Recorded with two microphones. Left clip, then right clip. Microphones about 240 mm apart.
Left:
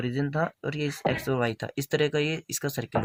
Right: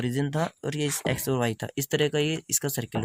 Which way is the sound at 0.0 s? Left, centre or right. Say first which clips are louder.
Even; right.